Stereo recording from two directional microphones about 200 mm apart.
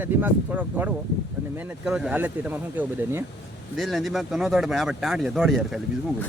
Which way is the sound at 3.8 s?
Centre (ahead or behind).